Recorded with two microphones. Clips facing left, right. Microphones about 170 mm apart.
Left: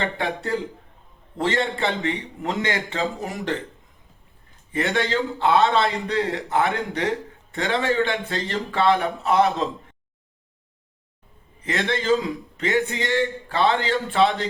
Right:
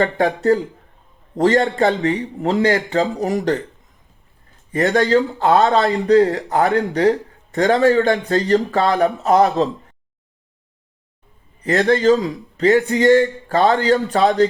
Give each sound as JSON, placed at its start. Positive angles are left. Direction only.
{"t": 0.0, "sound": "a man's voice", "side_deg": -40}
{"t": 4.7, "sound": "a man's voice", "side_deg": -40}
{"t": 11.6, "sound": "a man's voice", "side_deg": -40}